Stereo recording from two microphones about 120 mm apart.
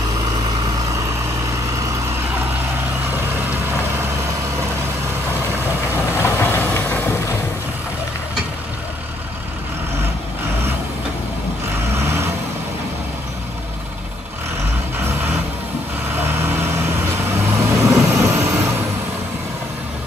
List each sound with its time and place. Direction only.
6.1 s vehicle: 20° left (ahead or behind)
16.2 s vehicle: 20° right (ahead or behind)